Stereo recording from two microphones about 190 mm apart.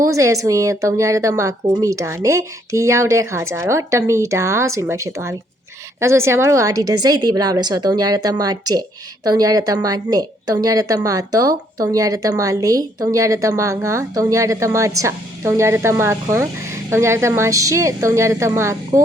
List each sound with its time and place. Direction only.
0.0 s a woman's voice: 15° right (ahead or behind)